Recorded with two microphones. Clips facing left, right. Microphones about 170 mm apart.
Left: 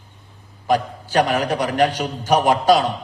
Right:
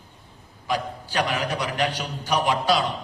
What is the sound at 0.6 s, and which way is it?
A man's voice, 45° left (ahead or behind).